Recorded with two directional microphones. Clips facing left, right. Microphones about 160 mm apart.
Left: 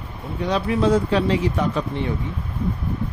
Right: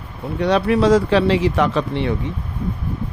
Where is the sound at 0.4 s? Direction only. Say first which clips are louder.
Right 5 dB; 70° right (ahead or behind).